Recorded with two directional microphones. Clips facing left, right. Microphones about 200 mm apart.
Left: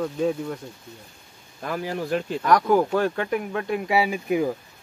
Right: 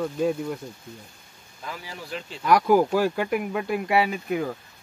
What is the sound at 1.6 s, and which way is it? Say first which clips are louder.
Speech: left 10 dB; 55° left (ahead or behind).